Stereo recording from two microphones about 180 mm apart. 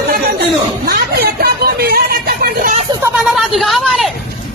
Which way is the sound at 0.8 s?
55° right (ahead or behind).